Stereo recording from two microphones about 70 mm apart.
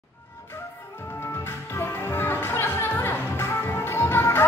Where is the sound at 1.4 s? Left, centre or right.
Left.